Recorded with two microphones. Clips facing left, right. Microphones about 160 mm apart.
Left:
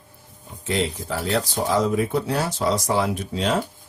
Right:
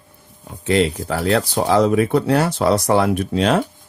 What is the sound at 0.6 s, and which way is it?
Speech, 70° right (ahead or behind).